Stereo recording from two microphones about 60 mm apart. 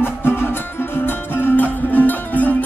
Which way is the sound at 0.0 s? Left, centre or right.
Left.